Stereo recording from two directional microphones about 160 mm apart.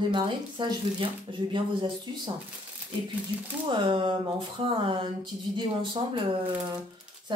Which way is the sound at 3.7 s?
30° right (ahead or behind).